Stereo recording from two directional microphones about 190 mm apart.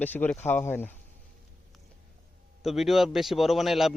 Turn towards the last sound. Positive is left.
turn(degrees=0)  # may be behind; listen again after turning